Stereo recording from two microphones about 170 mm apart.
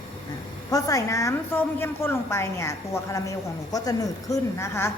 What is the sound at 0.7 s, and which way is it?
A woman's voice, 20° left (ahead or behind).